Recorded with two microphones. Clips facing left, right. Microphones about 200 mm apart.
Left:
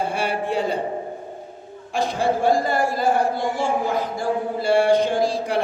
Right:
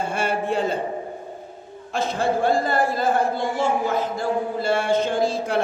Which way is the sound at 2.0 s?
15° left (ahead or behind).